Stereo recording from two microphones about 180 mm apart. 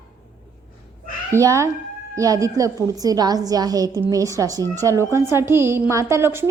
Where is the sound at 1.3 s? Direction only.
15° right (ahead or behind).